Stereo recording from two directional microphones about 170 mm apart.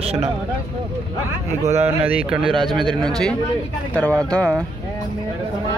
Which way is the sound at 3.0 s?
5° left (ahead or behind).